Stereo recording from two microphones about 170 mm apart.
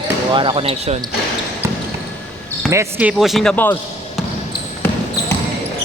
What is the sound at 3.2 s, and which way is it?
Speech, centre (ahead or behind).